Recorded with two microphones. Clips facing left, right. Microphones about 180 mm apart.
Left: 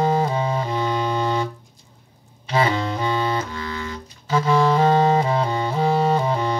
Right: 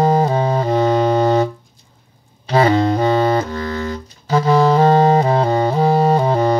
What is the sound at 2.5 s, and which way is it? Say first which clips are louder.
Music: right 7 dB; 40° right (ahead or behind).